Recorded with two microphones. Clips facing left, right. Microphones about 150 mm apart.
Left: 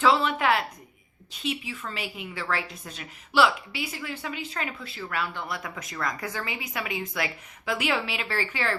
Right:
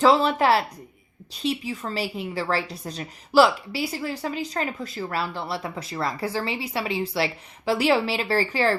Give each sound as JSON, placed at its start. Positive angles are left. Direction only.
{"t": 0.0, "sound": "a woman's voice", "side_deg": -35}